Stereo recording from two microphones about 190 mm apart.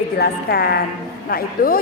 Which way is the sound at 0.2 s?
55° left (ahead or behind).